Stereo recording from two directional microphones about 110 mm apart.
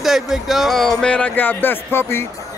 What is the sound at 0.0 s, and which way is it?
Speech, 5° right (ahead or behind).